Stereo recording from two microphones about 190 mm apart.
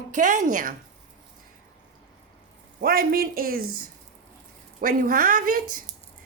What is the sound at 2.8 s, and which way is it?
Speech, 50° right (ahead or behind).